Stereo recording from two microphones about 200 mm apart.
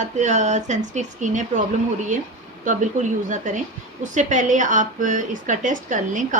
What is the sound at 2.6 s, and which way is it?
A woman's voice, 40° right (ahead or behind).